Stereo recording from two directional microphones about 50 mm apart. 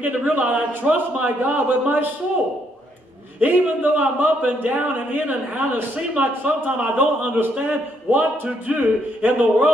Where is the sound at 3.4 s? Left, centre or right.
Right.